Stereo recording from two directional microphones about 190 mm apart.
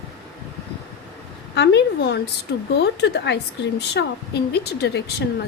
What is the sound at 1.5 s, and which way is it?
A woman's voice, 65° left (ahead or behind).